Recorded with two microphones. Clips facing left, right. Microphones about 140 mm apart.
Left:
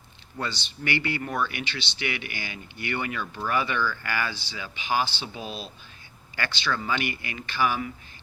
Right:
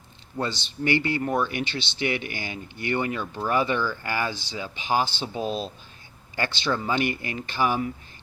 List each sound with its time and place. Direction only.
0.4 s speech: 40° right (ahead or behind)
1.5 s speech: 45° right (ahead or behind); by 4.4 s 20° right (ahead or behind)
4.5 s speech: 35° right (ahead or behind)